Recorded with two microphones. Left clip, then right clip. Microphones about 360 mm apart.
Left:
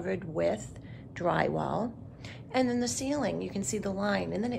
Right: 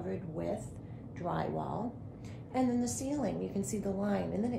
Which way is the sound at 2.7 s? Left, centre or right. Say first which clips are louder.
Left 4 dB; centre.